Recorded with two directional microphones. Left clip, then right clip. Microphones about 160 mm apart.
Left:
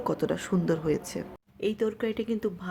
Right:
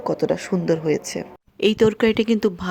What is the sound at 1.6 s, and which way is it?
Speech, 60° right (ahead or behind).